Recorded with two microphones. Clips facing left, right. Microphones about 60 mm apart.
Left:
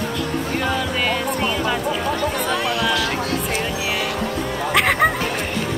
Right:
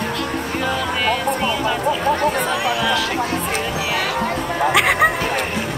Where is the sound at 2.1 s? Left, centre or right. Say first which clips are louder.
Right 3 dB; right.